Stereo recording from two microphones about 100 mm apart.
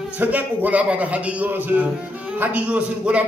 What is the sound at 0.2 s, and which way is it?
A man's voice, 15° right (ahead or behind).